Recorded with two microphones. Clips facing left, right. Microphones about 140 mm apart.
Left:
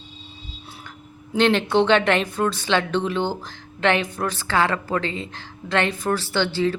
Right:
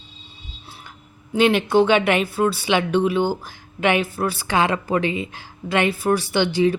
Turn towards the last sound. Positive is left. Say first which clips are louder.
# right 3 dB
turn(degrees=-15)  # may be behind; listen again after turning